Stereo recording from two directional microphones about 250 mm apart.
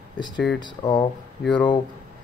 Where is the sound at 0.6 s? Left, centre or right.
Centre.